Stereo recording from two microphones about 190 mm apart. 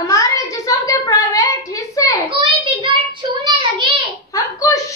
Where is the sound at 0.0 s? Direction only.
15° left (ahead or behind).